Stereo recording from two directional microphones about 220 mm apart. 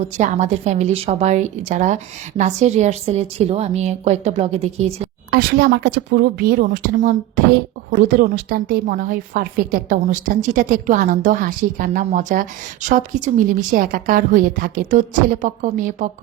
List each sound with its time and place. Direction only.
0.2 s a woman's voice: 30° right (ahead or behind)
5.3 s a woman's voice: 45° right (ahead or behind)